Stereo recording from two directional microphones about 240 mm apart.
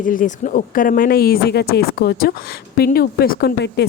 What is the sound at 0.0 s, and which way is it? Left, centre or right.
Speech, left.